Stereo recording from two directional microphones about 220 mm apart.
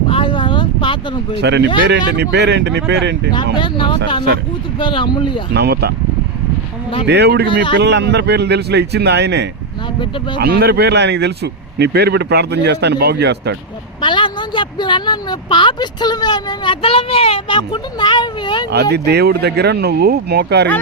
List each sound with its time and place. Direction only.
0.1 s a sound: 25° left (ahead or behind)
1.4 s speech: 50° right (ahead or behind)
3.3 s speech: 20° left (ahead or behind)
5.5 s speech: 45° right (ahead or behind)
7.1 s speech: 50° right (ahead or behind)
7.4 s speech: 20° left (ahead or behind)
7.8 s speech: 50° right (ahead or behind)
14.0 s speech: 20° left (ahead or behind)
18.7 s speech: 50° right (ahead or behind)